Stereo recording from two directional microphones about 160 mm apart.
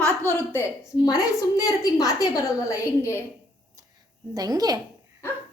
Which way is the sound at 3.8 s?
20° right (ahead or behind).